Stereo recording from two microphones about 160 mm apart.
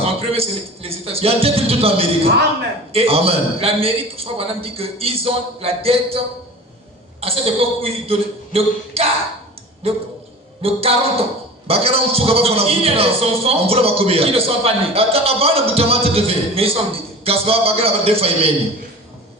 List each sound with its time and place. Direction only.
0.0 s a man's voice: 35° right (ahead or behind)
10.6 s a man's voice: 35° right (ahead or behind)